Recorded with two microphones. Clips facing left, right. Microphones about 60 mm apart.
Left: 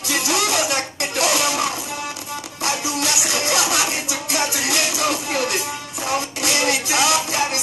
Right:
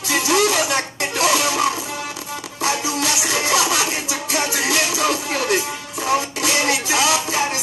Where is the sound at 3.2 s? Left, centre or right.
Right.